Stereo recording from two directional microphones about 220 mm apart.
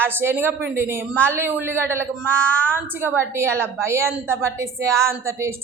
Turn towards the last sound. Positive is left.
turn(degrees=-10)  # may be behind; listen again after turning